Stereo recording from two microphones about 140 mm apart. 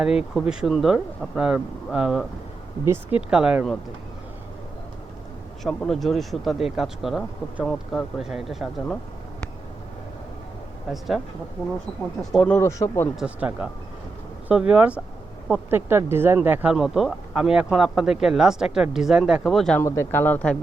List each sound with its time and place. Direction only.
0.0 s speech: 5° right (ahead or behind)
5.6 s speech: centre (ahead or behind)
10.8 s speech: centre (ahead or behind)
12.2 s speech: centre (ahead or behind)
12.5 s speech: 20° left (ahead or behind)
13.1 s speech: 5° right (ahead or behind)
19.8 s speech: 15° left (ahead or behind)